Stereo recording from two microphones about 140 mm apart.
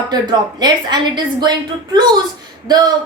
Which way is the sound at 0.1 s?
30° right (ahead or behind).